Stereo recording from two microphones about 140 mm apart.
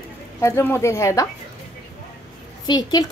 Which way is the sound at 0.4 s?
20° left (ahead or behind).